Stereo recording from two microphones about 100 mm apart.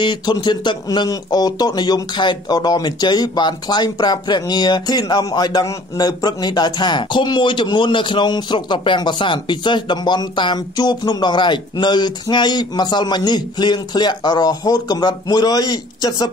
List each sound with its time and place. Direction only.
0.0 s speech: 45° left (ahead or behind)